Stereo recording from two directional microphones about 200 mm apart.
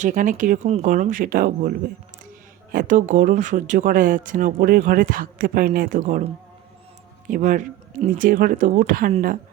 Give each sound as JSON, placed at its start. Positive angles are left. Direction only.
{"t": 0.0, "sound": "speech", "side_deg": -40}
{"t": 2.7, "sound": "speech", "side_deg": -40}